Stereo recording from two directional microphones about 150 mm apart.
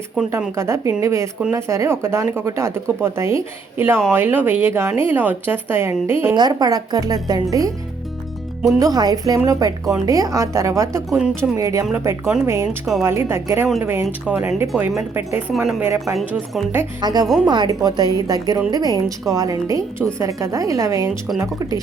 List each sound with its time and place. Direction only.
0.3 s a woman's voice: 20° right (ahead or behind)
6.3 s a woman's voice: 25° right (ahead or behind)
8.8 s a woman's voice: 25° right (ahead or behind)
11.2 s speech: 5° right (ahead or behind)
11.5 s a woman's voice: 20° right (ahead or behind); by 15.8 s centre (ahead or behind)
15.8 s a woman's voice: 20° right (ahead or behind)
17.2 s speech: centre (ahead or behind)
17.5 s a woman's voice: 25° right (ahead or behind)